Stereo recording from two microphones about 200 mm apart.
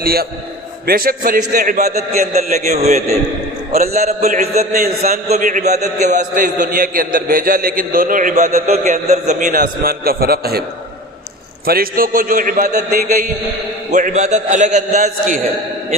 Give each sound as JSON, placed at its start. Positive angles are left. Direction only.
{"t": 0.0, "sound": "a man's voice", "side_deg": -50}
{"t": 11.6, "sound": "a man's voice", "side_deg": -50}